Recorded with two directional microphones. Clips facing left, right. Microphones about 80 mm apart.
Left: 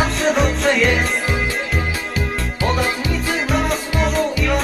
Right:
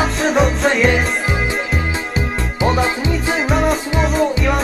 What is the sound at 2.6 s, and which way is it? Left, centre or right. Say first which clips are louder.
Music: right 4 dB; right.